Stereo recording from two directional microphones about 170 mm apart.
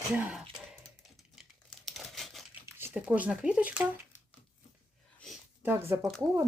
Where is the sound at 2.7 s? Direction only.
10° right (ahead or behind).